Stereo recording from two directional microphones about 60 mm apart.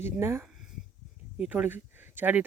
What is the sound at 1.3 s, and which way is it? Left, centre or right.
Speech, right.